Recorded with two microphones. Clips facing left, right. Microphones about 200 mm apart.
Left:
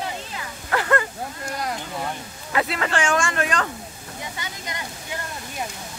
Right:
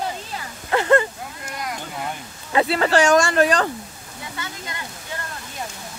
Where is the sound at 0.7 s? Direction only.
25° right (ahead or behind).